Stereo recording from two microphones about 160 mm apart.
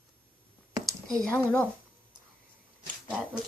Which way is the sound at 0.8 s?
Centre (ahead or behind).